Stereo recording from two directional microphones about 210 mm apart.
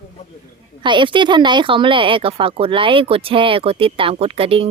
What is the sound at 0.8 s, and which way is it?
Speech, 20° right (ahead or behind).